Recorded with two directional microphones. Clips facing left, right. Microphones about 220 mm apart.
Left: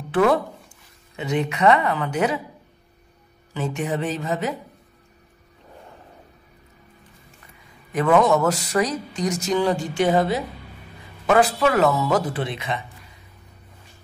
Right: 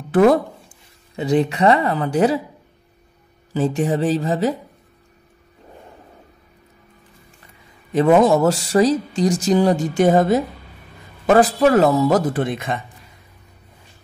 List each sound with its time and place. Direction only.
0.1 s speech: 40° right (ahead or behind)
3.5 s speech: 35° right (ahead or behind)
7.9 s speech: 30° right (ahead or behind); by 12.8 s 45° right (ahead or behind)